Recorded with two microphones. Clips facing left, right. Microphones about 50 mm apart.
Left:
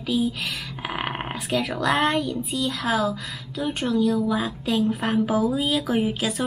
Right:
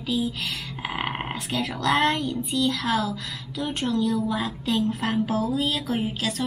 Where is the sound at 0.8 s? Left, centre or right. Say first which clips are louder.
Even; centre.